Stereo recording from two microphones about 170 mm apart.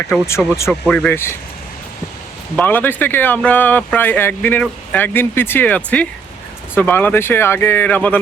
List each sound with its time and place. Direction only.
0.3 s speech: 15° left (ahead or behind)
2.6 s speech: 10° left (ahead or behind)